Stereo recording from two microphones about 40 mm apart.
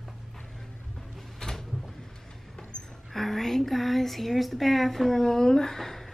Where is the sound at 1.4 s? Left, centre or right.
Centre.